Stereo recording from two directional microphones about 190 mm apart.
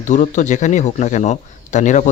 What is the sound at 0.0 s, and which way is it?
A man's voice, 40° left (ahead or behind).